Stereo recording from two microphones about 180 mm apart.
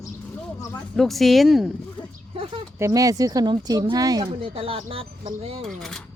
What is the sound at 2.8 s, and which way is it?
Speech, 20° right (ahead or behind).